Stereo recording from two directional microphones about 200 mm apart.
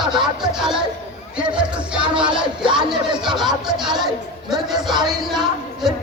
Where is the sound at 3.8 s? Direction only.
20° right (ahead or behind).